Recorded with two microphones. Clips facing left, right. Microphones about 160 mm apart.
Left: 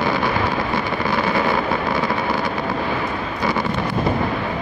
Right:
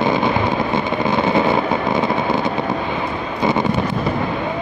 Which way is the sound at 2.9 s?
20° right (ahead or behind).